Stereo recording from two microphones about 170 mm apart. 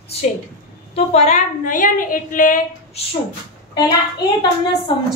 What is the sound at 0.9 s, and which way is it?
A woman's voice, 40° left (ahead or behind).